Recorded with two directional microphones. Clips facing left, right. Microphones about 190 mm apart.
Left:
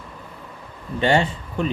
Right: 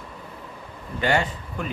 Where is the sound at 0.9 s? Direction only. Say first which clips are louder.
Left 4 dB; 25° left (ahead or behind).